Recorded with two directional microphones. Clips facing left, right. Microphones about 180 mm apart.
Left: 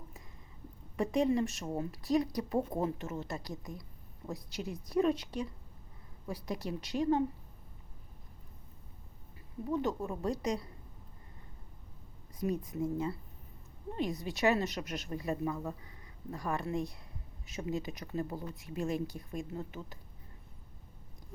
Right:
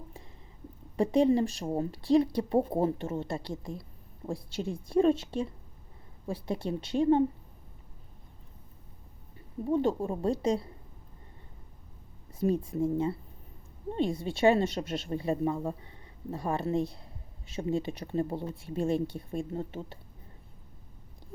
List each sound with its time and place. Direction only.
0.9 s a woman's voice: 30° right (ahead or behind)
9.6 s a woman's voice: 30° right (ahead or behind)
12.3 s a woman's voice: 30° right (ahead or behind)